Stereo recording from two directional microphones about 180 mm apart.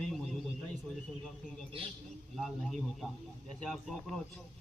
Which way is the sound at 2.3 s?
Centre (ahead or behind).